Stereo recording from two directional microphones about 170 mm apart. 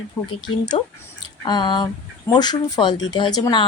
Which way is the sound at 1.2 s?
25° left (ahead or behind).